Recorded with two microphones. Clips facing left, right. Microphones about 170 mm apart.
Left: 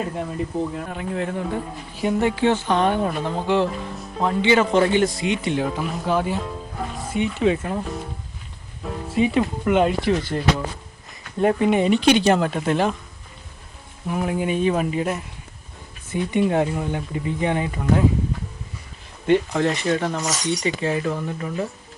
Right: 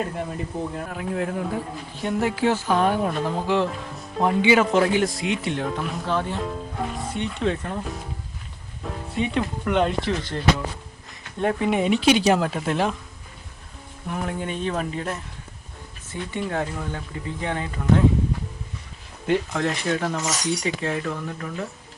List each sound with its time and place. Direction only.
0.2 s a man's voice: centre (ahead or behind)
4.2 s a man's voice: 15° right (ahead or behind); by 7.8 s 5° left (ahead or behind)
8.8 s a man's voice: centre (ahead or behind)
14.1 s speech: 5° left (ahead or behind)
19.3 s a man's voice: centre (ahead or behind)